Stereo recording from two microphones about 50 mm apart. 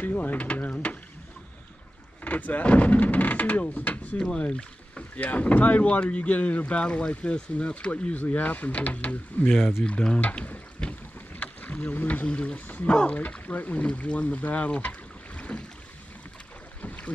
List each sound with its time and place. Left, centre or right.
0.0 s mechanisms: left
2.2 s speech: left
4.4 s speech: left
9.8 s speech: centre
10.2 s speech: left
10.8 s boat: centre
11.4 s boat: left
12.3 s speech: left
16.8 s boat: left